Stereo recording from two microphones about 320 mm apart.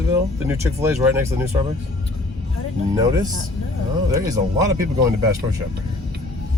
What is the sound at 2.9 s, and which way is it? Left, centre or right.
Speech, centre.